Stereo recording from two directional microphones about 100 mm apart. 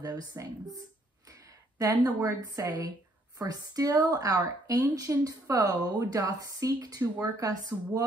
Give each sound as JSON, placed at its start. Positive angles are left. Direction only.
{"t": 0.0, "sound": "a woman's voice", "side_deg": -40}
{"t": 1.8, "sound": "a woman's voice", "side_deg": -35}